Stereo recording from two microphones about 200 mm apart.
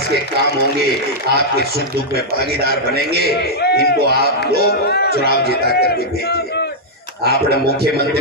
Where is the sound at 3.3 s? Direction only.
55° left (ahead or behind).